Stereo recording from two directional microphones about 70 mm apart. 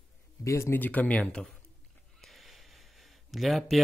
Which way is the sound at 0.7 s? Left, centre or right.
Left.